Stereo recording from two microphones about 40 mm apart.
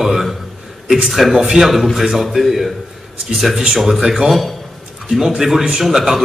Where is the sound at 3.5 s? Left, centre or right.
Centre.